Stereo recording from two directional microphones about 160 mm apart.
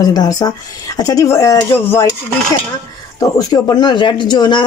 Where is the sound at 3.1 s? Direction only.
25° left (ahead or behind).